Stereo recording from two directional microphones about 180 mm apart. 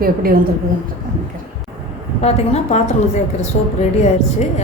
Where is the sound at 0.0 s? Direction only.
55° right (ahead or behind).